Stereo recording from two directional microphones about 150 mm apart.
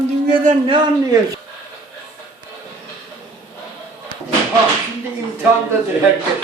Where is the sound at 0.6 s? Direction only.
35° right (ahead or behind).